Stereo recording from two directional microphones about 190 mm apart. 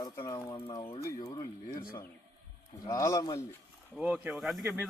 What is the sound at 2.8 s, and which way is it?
Speech, 15° left (ahead or behind).